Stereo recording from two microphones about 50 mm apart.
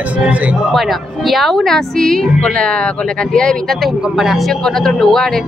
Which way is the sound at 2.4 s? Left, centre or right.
Left.